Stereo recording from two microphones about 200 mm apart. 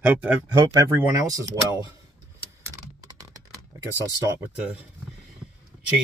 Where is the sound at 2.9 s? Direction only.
20° right (ahead or behind).